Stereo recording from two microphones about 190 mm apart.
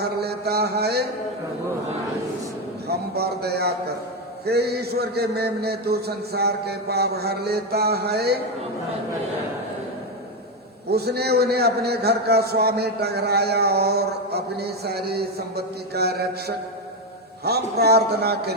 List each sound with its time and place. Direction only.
0.2 s a sound: 55° right (ahead or behind)
2.8 s a man's voice: 55° right (ahead or behind)
10.9 s a man's voice: 55° right (ahead or behind)